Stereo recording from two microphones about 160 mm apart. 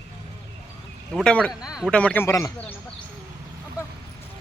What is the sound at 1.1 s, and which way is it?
Speech, 5° left (ahead or behind).